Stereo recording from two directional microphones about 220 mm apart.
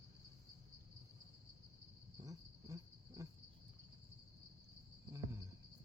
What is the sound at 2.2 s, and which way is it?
Cricket, 15° right (ahead or behind).